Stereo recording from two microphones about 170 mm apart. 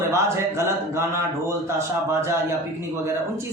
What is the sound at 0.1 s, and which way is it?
Speech, 15° right (ahead or behind).